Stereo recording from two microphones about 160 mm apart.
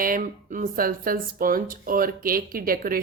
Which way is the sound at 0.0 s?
60° right (ahead or behind).